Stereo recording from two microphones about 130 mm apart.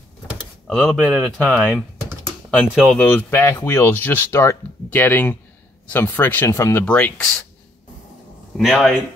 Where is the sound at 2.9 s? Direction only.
15° left (ahead or behind).